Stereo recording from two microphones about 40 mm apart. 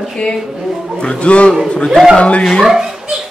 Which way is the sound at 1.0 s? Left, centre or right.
Left.